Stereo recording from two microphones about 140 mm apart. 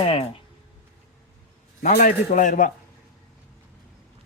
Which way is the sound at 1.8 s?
60° left (ahead or behind).